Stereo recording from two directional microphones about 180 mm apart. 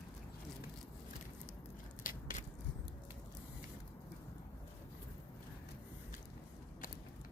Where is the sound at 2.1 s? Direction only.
50° left (ahead or behind).